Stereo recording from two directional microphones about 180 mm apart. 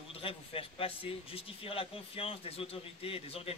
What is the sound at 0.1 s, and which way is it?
A man's voice, 30° left (ahead or behind).